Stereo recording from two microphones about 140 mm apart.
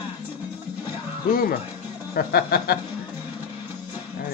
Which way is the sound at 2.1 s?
90° left.